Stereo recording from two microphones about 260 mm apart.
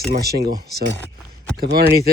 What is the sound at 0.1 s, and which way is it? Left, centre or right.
Speech, right.